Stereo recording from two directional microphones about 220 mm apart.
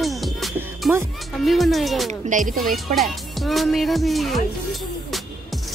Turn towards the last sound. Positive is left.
turn(degrees=0)  # may be behind; listen again after turning